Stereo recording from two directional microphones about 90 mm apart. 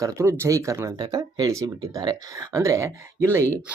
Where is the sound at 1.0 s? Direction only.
55° right (ahead or behind).